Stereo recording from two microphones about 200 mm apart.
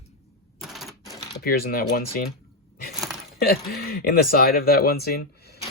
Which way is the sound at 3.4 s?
50° left (ahead or behind).